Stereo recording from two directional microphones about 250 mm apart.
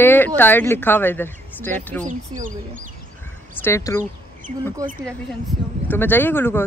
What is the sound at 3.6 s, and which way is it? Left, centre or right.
Speech, centre.